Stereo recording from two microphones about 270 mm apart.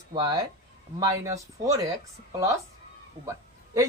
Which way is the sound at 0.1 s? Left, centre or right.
Centre.